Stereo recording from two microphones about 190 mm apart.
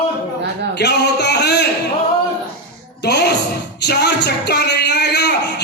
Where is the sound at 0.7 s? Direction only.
60° left (ahead or behind).